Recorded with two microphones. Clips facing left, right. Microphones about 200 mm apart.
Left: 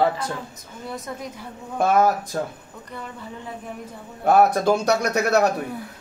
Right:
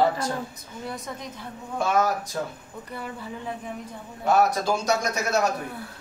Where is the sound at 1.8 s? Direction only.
55° left (ahead or behind).